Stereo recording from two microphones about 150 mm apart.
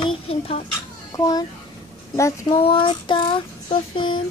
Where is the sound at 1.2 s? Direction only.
25° left (ahead or behind).